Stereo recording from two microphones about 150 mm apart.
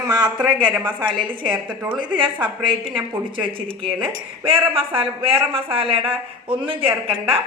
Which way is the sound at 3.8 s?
35° right (ahead or behind).